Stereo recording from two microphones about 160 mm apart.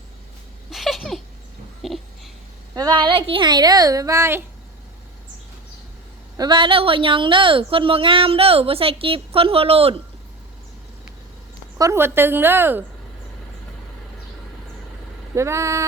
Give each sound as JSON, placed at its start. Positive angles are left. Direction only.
{"t": 0.7, "sound": "a sound", "side_deg": 0}
{"t": 2.7, "sound": "speech", "side_deg": -25}
{"t": 6.3, "sound": "a woman's voice", "side_deg": -25}
{"t": 11.8, "sound": "speech", "side_deg": -15}
{"t": 15.4, "sound": "speech", "side_deg": -20}